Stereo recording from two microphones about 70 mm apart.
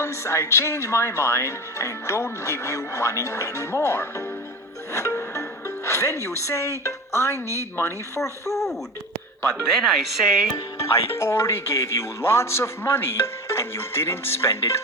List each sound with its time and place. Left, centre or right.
0.0 s speech: left
4.9 s music: left
6.2 s speech: left
7.3 s speech: right
7.8 s speech: left
9.7 s speech: centre
10.8 s speech: left